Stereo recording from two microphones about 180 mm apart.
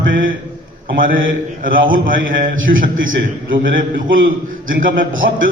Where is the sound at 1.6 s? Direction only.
50° right (ahead or behind).